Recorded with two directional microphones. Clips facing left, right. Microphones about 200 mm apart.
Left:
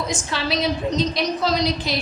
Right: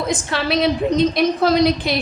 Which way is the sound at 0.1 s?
60° right (ahead or behind).